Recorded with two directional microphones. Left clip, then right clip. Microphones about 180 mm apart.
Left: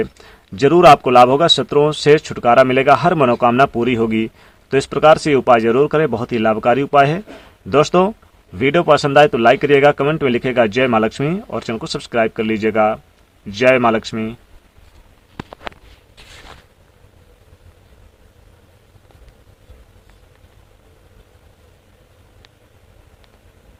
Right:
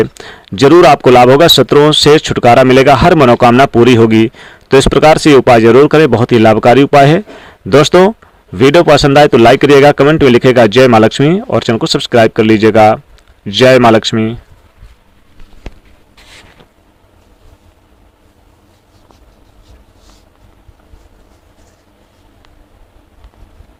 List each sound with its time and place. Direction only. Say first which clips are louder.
0.0 s speech: right 9 dB; 40° right (ahead or behind)